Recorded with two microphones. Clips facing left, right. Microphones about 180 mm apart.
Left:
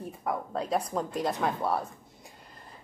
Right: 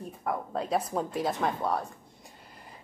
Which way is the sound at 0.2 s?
Centre (ahead or behind).